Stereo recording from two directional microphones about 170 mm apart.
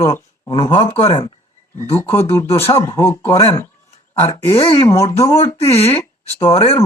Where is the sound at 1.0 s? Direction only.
35° left (ahead or behind).